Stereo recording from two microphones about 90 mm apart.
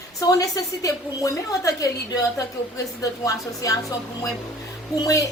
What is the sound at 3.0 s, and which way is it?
A woman's voice, 40° left (ahead or behind).